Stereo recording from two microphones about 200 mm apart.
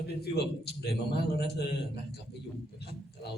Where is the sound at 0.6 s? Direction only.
55° left (ahead or behind).